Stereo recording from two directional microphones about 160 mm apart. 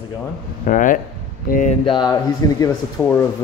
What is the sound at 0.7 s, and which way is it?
Speech, 55° left (ahead or behind).